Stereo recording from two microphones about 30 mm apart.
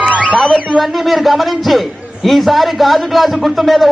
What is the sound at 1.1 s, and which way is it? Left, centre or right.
Speech, centre.